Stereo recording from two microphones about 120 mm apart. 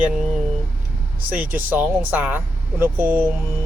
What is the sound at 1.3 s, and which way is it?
Speech, 15° right (ahead or behind).